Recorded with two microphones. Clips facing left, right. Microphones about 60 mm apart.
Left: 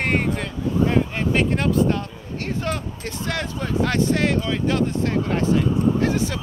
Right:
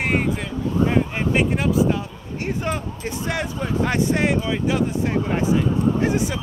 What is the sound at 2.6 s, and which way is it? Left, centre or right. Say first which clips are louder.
Speech: right 1 dB; centre.